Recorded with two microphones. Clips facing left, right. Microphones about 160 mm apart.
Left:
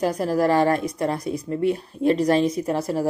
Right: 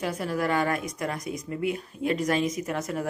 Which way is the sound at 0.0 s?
40° left (ahead or behind).